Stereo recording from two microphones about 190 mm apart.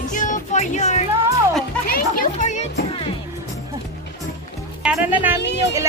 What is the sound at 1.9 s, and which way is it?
Speech, 50° left (ahead or behind).